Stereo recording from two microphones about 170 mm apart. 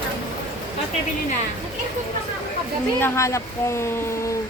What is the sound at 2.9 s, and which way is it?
Speech, 15° left (ahead or behind).